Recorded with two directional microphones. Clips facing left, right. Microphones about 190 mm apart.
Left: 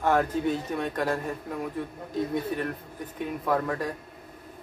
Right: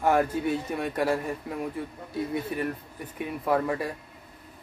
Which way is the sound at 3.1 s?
10° right (ahead or behind).